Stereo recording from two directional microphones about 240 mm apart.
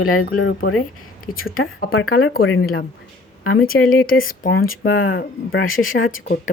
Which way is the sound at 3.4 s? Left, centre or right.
Left.